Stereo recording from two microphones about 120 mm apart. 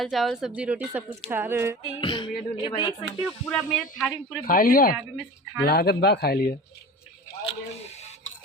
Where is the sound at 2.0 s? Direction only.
40° left (ahead or behind).